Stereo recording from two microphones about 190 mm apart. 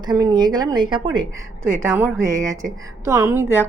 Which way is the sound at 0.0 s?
20° right (ahead or behind).